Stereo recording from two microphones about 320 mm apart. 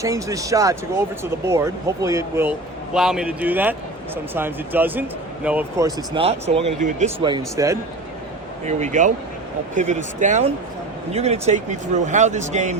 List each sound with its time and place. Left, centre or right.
0.0 s speech: centre
8.6 s speech: right